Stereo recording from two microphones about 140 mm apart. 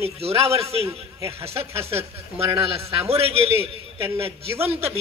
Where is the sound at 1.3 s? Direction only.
45° right (ahead or behind).